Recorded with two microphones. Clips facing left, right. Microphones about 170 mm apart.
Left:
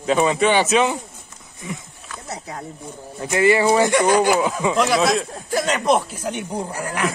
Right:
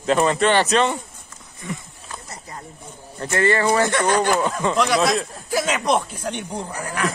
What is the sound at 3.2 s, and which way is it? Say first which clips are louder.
Speech: left 3 dB; 10° left (ahead or behind).